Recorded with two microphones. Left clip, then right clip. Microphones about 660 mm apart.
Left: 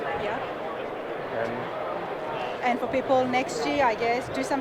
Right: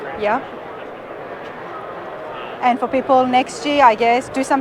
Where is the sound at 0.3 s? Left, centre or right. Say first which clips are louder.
Right 12 dB; right.